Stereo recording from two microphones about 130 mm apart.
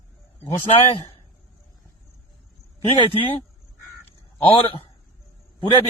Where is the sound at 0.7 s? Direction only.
55° left (ahead or behind).